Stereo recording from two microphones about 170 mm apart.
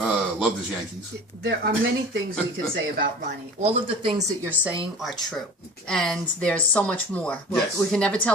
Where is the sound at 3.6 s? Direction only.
35° right (ahead or behind).